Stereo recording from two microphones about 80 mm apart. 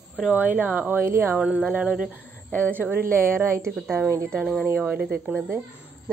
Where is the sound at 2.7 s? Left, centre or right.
Right.